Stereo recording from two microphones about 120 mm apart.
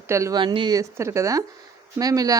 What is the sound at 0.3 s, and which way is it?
Speech, 40° right (ahead or behind).